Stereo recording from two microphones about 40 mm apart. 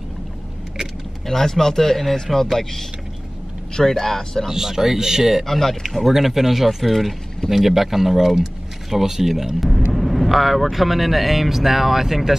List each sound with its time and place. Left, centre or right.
1.2 s speech: centre
4.5 s speech: centre
5.4 s speech: centre